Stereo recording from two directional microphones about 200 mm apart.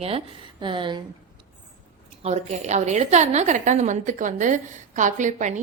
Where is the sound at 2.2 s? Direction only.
35° right (ahead or behind).